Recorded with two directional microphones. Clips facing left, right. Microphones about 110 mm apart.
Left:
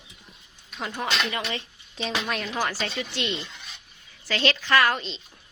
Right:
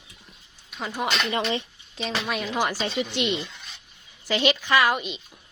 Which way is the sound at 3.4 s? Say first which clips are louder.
Right 2 dB; centre (ahead or behind).